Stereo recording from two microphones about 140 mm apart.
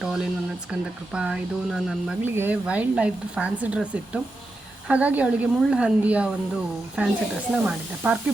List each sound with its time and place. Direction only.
0.0 s a sound: 5° right (ahead or behind)
0.7 s speech: 5° right (ahead or behind)
2.2 s a woman's voice: 15° right (ahead or behind)